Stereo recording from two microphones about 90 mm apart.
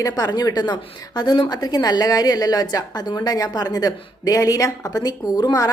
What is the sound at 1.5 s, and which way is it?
A woman's voice, 45° left (ahead or behind).